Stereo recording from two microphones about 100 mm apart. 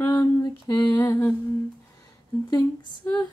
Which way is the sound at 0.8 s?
15° left (ahead or behind).